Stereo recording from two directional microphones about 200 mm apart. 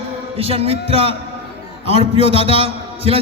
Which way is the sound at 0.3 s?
30° right (ahead or behind).